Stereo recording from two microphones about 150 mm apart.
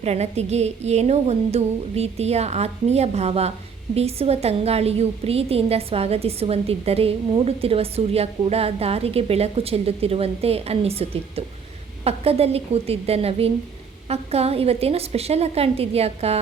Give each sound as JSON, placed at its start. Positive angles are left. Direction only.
{"t": 0.0, "sound": "a woman's voice", "side_deg": -45}